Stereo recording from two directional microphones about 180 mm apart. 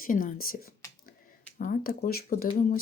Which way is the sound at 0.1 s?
50° left (ahead or behind).